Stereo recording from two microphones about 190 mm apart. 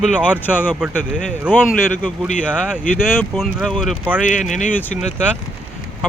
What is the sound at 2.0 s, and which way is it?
Speech, 5° left (ahead or behind).